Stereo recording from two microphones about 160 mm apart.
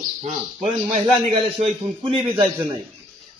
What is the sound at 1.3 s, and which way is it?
Speech, 35° right (ahead or behind).